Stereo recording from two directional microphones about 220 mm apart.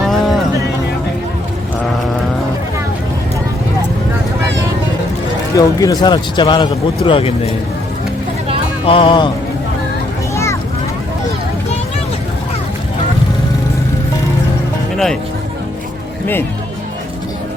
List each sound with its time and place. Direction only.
0.0 s a sound: centre (ahead or behind)
5.5 s speech: 15° left (ahead or behind)
8.9 s speech: 25° left (ahead or behind)
10.3 s boat: 10° left (ahead or behind)
14.9 s speech: centre (ahead or behind)